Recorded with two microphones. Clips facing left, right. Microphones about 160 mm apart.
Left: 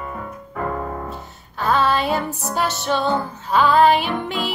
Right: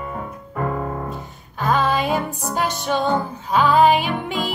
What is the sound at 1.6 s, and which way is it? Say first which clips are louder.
Music: left 1 dB; 10° right (ahead or behind).